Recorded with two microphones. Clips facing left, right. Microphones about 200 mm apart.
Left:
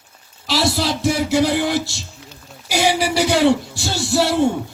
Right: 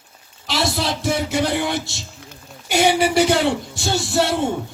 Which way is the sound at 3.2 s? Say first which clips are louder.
Left 2 dB; 65° left (ahead or behind).